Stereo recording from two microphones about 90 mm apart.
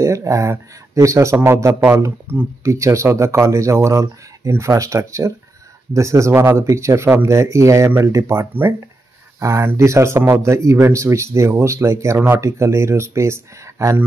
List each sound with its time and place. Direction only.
0.0 s speech: 35° right (ahead or behind)